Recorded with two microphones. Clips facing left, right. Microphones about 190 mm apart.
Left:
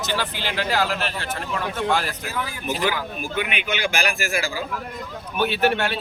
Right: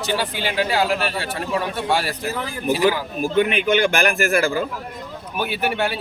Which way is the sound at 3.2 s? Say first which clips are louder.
Right 11 dB; 35° right (ahead or behind).